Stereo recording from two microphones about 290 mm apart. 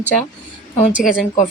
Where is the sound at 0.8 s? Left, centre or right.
Left.